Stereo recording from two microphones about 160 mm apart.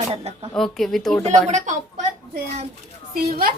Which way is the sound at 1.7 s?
50° right (ahead or behind).